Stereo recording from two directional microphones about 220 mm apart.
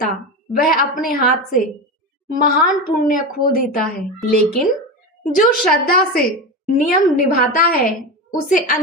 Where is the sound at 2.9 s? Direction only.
40° left (ahead or behind).